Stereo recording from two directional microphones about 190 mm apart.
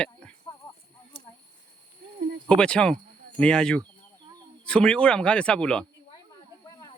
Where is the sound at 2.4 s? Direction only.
5° left (ahead or behind).